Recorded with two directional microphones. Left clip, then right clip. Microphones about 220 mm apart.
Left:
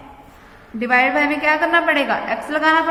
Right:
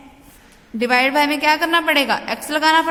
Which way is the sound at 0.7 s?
50° right (ahead or behind).